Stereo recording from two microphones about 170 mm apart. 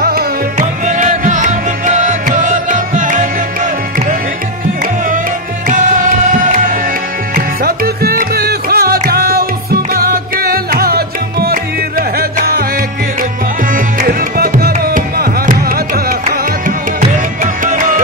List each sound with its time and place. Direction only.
0.0 s music: 65° right (ahead or behind)
0.6 s music: 45° right (ahead or behind)
5.7 s music: 50° right (ahead or behind)
7.3 s music: 65° right (ahead or behind)
13.7 s music: 55° right (ahead or behind)